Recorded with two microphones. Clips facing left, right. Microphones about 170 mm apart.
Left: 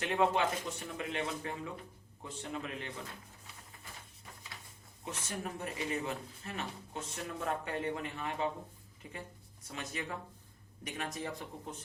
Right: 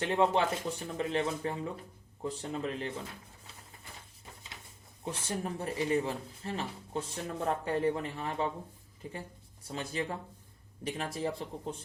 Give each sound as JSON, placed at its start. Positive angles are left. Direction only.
{"t": 0.0, "sound": "speech", "side_deg": -30}
{"t": 5.0, "sound": "speech", "side_deg": -30}